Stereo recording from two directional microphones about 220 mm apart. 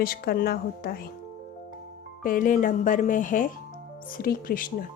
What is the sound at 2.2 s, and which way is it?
A woman's voice, 40° left (ahead or behind).